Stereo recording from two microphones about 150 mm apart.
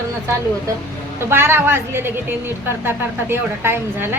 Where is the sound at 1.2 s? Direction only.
15° right (ahead or behind).